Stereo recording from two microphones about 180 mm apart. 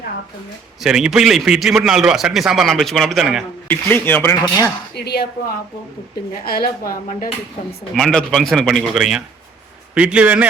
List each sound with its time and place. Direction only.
0.8 s a man's voice: 5° right (ahead or behind)
3.7 s speech: 10° left (ahead or behind)
4.9 s speech: 65° left (ahead or behind)
6.4 s speech: 55° left (ahead or behind)
7.9 s a man's voice: centre (ahead or behind)